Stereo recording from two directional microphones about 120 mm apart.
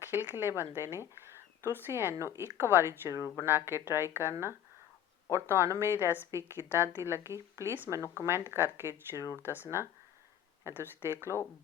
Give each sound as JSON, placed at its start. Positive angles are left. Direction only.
{"t": 0.0, "sound": "speech", "side_deg": -15}
{"t": 11.3, "sound": "speech", "side_deg": 25}